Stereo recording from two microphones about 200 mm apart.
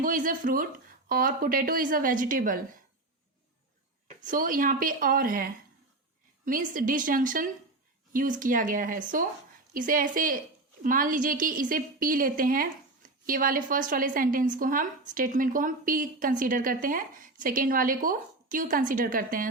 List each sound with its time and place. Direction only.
0.0 s a woman's voice: 40° right (ahead or behind)
4.2 s a woman's voice: 40° right (ahead or behind)